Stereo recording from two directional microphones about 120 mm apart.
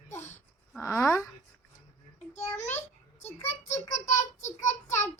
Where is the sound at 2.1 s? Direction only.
70° left (ahead or behind).